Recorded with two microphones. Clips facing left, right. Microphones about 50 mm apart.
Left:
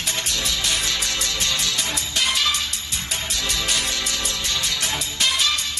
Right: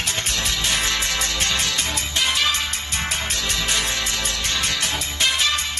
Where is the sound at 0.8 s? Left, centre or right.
Right.